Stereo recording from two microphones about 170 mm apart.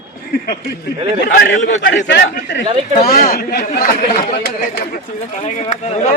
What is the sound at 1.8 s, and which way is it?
Speech, 90° left.